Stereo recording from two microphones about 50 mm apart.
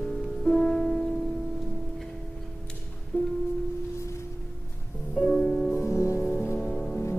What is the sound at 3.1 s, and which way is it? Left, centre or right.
Music, left.